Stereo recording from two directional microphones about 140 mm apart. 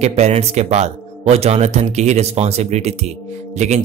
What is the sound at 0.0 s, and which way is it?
Speech, 50° right (ahead or behind).